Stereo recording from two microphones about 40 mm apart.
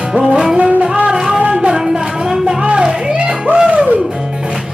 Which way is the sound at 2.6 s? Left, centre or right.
Right.